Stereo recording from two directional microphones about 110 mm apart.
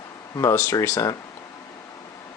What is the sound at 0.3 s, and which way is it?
Speech, 25° left (ahead or behind).